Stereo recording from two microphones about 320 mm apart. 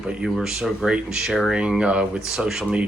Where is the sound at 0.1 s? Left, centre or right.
Centre.